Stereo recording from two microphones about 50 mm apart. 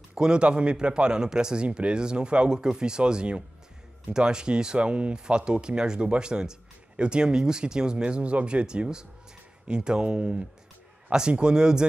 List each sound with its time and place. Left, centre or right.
0.1 s a man's voice: centre